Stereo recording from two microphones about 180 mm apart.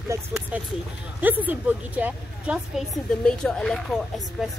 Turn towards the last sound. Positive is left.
turn(degrees=0)  # may be behind; listen again after turning